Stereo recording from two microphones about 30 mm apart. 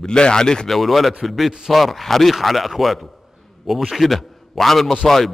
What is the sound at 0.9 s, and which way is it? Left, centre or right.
A man's voice, centre.